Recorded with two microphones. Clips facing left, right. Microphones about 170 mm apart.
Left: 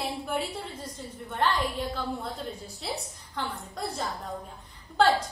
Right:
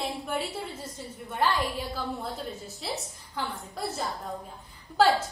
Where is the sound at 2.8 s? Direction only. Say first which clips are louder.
Even; centre (ahead or behind).